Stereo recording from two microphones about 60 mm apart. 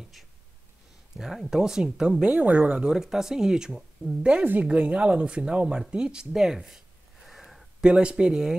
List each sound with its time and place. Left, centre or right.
1.1 s speech: centre
2.2 s speech: right; by 4.2 s centre
4.2 s a woman's voice: centre
7.8 s speech: centre